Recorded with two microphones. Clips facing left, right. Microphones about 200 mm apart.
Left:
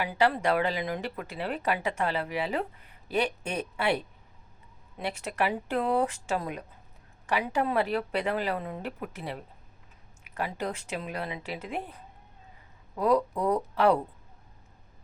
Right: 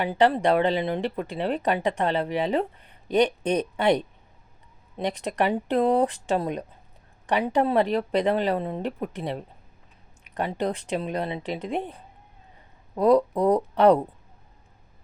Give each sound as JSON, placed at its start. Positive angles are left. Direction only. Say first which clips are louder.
{"t": 0.0, "sound": "speech", "louder": "right 5 dB", "side_deg": -30}
{"t": 13.0, "sound": "speech", "louder": "right 6 dB", "side_deg": -35}